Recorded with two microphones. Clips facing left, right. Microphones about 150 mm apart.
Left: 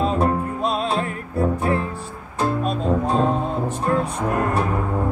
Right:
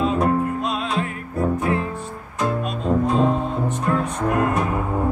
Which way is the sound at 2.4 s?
30° left (ahead or behind).